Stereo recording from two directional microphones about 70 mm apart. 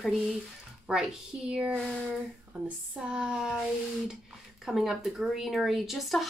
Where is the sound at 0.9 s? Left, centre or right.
Centre.